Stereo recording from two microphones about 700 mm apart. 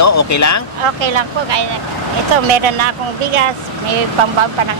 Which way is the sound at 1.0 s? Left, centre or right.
Right.